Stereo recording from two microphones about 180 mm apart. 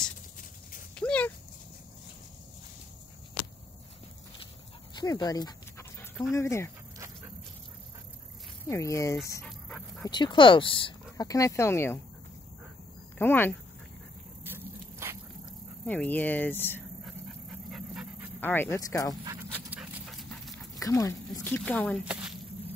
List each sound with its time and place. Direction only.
0.9 s dog: 5° left (ahead or behind)
4.9 s dog: 20° left (ahead or behind)
6.3 s speech: 15° left (ahead or behind)
8.6 s speech: 15° left (ahead or behind)
9.7 s dog: 5° left (ahead or behind)
10.0 s speech: 25° left (ahead or behind)
13.2 s speech: 10° left (ahead or behind)
14.4 s vehicle: 10° right (ahead or behind)
15.8 s speech: 10° left (ahead or behind)
17.0 s dog: centre (ahead or behind)
18.4 s speech: 10° left (ahead or behind)
19.7 s dog: 5° right (ahead or behind)
20.7 s speech: 20° left (ahead or behind)
22.0 s squish: 5° right (ahead or behind)